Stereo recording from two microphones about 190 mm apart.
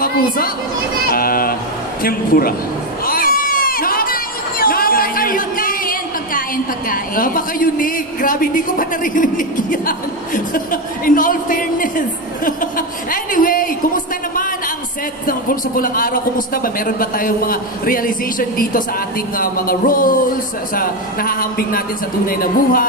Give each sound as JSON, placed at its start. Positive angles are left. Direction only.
{"t": 1.1, "sound": "vehicle", "side_deg": 50}
{"t": 2.0, "sound": "speech", "side_deg": 50}
{"t": 3.1, "sound": "crowd", "side_deg": 50}
{"t": 12.4, "sound": "speech", "side_deg": 45}